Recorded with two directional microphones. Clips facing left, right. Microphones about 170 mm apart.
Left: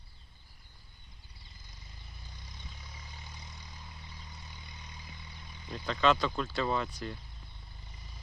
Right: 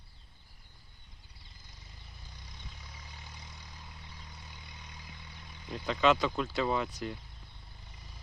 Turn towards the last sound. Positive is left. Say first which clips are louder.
# right 1 dB
turn(degrees=-10)  # may be behind; listen again after turning